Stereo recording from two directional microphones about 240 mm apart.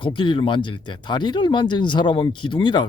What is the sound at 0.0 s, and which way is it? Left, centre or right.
Speech, left.